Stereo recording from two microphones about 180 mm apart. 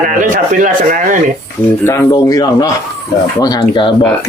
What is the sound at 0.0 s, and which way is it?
Speech, 45° right (ahead or behind).